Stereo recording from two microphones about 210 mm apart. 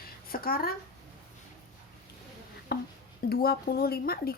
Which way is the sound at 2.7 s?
50° left (ahead or behind).